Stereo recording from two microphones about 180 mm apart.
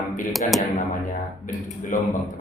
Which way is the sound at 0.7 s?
45° left (ahead or behind).